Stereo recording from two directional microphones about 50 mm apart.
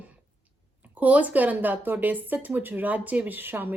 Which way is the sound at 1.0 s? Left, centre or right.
Right.